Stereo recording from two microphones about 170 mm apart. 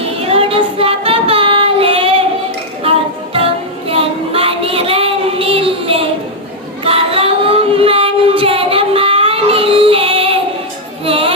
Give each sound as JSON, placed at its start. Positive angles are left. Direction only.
{"t": 0.2, "sound": "child singing", "side_deg": -35}
{"t": 3.3, "sound": "child singing", "side_deg": -35}
{"t": 11.0, "sound": "music", "side_deg": -35}